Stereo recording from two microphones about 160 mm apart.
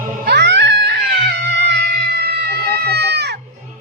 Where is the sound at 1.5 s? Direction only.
90° right.